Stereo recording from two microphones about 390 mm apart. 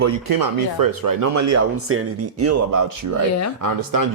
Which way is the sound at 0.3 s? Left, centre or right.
Right.